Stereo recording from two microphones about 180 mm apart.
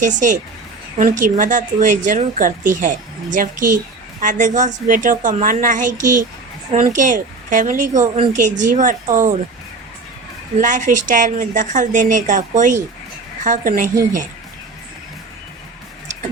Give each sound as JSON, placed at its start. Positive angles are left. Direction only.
{"t": 0.0, "sound": "speech", "side_deg": -45}
{"t": 10.6, "sound": "speech", "side_deg": -45}